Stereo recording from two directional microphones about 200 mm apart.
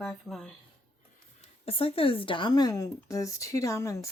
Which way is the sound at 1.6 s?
30° left (ahead or behind).